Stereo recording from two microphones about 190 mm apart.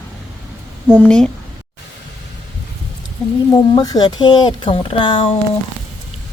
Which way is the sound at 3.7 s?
20° left (ahead or behind).